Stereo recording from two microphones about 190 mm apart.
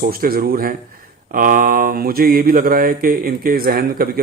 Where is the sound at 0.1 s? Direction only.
50° right (ahead or behind).